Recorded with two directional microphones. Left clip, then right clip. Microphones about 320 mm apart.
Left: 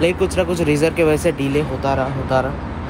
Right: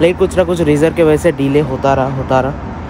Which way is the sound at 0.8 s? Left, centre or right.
Right.